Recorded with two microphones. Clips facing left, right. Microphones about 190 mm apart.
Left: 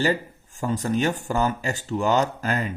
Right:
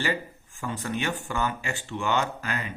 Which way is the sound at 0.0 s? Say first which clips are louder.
Left 6 dB; 40° left (ahead or behind).